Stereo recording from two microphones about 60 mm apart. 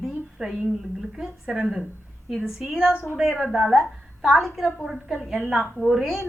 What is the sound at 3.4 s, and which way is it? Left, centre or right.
A woman's voice, centre.